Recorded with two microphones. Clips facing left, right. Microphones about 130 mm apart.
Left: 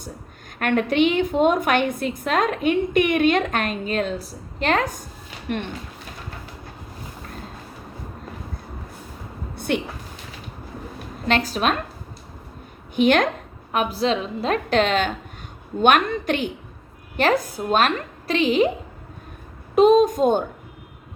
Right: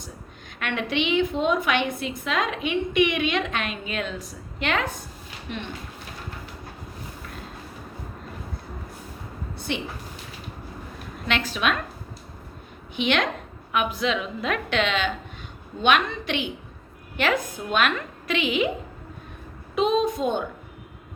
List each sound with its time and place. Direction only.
0.6 s a woman's voice: 45° left (ahead or behind)
9.6 s a sound: 55° left (ahead or behind)
11.3 s a woman's voice: 40° left (ahead or behind)
13.0 s a woman's voice: 45° left (ahead or behind)
19.7 s a woman's voice: 45° left (ahead or behind)